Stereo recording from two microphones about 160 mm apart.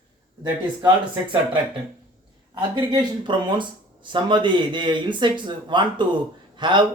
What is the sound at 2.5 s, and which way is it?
Speech, 25° right (ahead or behind).